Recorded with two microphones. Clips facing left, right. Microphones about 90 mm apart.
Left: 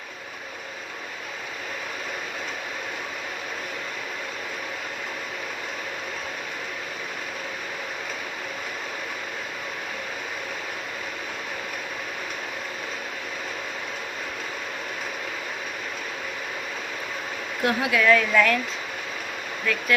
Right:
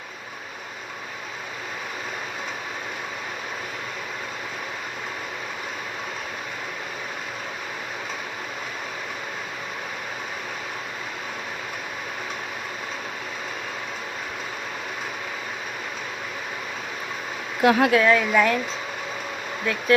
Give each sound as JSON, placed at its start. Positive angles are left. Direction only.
{"t": 17.6, "sound": "speech", "side_deg": -90}
{"t": 17.9, "sound": "a woman's voice", "side_deg": -25}
{"t": 19.7, "sound": "a woman's voice", "side_deg": -25}